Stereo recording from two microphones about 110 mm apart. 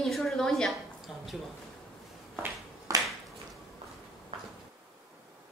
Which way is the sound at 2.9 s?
30° right (ahead or behind).